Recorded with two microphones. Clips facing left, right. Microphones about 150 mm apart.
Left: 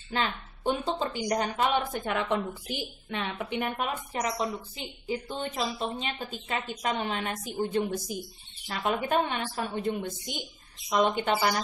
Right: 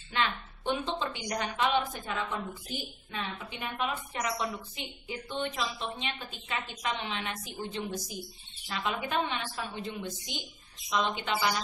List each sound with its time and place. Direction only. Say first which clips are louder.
0.1 s a woman's voice: left 1 dB; 40° left (ahead or behind)
2.0 s a woman's voice: left 6 dB; 70° left (ahead or behind)
3.3 s a woman's voice: left 5 dB; 55° left (ahead or behind)